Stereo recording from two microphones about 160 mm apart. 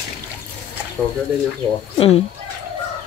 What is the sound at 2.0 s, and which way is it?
Speech, 40° left (ahead or behind).